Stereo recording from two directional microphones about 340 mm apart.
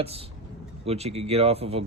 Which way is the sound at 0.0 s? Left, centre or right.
Centre.